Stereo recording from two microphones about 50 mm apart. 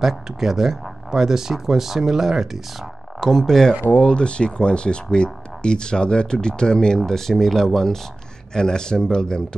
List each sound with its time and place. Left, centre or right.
0.0 s speech: centre
3.2 s speech: centre
3.9 s speech: left